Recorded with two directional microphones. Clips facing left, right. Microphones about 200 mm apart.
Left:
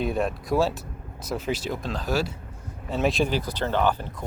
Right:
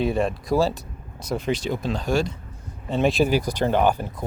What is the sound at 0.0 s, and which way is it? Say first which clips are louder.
Speech: right 3 dB; centre (ahead or behind).